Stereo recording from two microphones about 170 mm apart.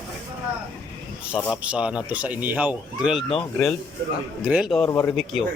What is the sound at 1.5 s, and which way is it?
A man's voice, 5° right (ahead or behind).